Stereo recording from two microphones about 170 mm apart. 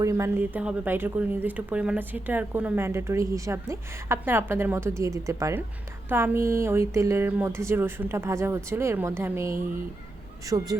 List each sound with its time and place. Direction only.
0.0 s a woman's voice: 15° right (ahead or behind)